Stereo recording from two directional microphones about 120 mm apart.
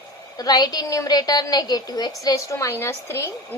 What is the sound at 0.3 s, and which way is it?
A woman's voice, 35° left (ahead or behind).